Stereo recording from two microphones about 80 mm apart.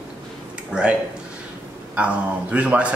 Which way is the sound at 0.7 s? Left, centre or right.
Centre.